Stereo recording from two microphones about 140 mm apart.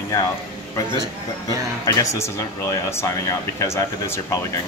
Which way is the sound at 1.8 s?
25° left (ahead or behind).